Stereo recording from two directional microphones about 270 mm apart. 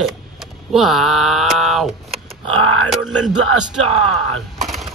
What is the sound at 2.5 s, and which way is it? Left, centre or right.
Grunt, right.